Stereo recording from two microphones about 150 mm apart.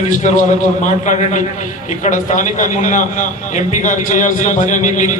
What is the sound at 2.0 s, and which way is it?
A man's voice, 60° left (ahead or behind).